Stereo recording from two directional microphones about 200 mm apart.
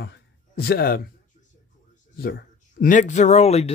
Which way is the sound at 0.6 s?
50° left (ahead or behind).